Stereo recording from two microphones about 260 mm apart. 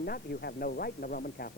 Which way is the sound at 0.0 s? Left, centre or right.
Left.